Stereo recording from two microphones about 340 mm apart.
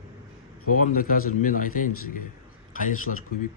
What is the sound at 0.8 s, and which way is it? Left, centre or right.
Speech, left.